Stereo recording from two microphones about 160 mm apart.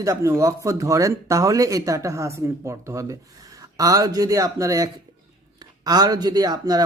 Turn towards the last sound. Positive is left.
turn(degrees=-20)  # may be behind; listen again after turning